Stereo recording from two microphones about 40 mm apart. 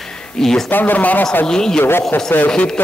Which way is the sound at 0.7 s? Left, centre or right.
Left.